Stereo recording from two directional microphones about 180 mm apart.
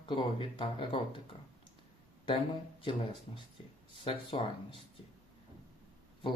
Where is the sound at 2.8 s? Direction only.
30° left (ahead or behind).